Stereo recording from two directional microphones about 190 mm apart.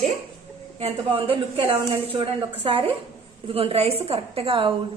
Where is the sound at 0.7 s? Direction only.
30° right (ahead or behind).